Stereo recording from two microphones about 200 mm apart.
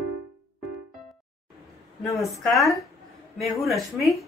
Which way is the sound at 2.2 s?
Centre (ahead or behind).